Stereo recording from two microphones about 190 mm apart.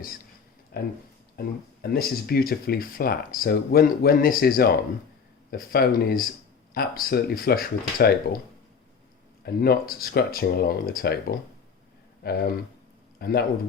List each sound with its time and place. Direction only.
0.7 s speech: 50° left (ahead or behind)
9.4 s speech: 55° left (ahead or behind)